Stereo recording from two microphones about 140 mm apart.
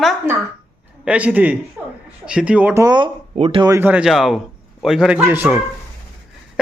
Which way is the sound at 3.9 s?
5° right (ahead or behind).